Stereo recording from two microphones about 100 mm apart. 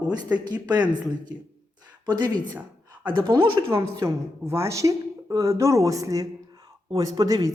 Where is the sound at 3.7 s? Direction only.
30° right (ahead or behind).